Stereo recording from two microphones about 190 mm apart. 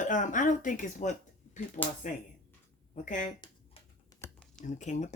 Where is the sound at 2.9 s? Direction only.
40° left (ahead or behind).